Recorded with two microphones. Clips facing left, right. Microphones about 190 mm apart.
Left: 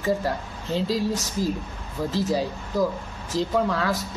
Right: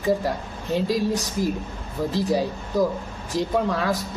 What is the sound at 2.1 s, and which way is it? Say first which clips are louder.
Speech: right 2 dB; 15° right (ahead or behind).